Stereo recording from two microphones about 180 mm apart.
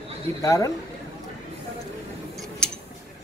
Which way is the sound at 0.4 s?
20° left (ahead or behind).